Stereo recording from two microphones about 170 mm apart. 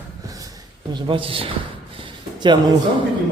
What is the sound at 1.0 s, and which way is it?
Speech, 30° right (ahead or behind).